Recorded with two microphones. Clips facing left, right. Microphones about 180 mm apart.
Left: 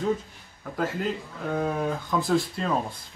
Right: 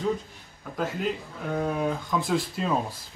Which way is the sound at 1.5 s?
Centre (ahead or behind).